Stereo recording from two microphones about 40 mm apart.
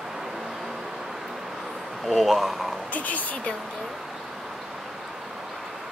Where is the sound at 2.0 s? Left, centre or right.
Centre.